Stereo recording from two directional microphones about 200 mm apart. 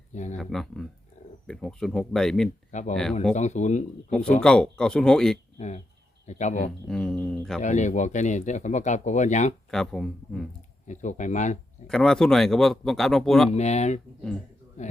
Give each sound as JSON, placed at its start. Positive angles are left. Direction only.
{"t": 0.1, "sound": "speech", "side_deg": 35}
{"t": 0.3, "sound": "speech", "side_deg": 0}
{"t": 3.3, "sound": "speech", "side_deg": 35}
{"t": 4.1, "sound": "speech", "side_deg": 5}
{"t": 5.5, "sound": "speech", "side_deg": 35}
{"t": 6.7, "sound": "speech", "side_deg": 5}
{"t": 7.6, "sound": "speech", "side_deg": 35}
{"t": 9.6, "sound": "speech", "side_deg": 0}
{"t": 10.8, "sound": "speech", "side_deg": 40}
{"t": 11.9, "sound": "speech", "side_deg": 5}
{"t": 13.5, "sound": "speech", "side_deg": 35}